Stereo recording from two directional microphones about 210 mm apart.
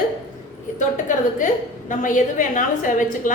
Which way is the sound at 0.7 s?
35° left (ahead or behind).